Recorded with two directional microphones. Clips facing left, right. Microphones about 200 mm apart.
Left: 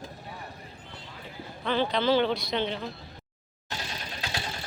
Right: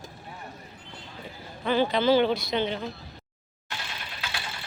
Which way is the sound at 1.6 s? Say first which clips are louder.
Right 3 dB; 5° right (ahead or behind).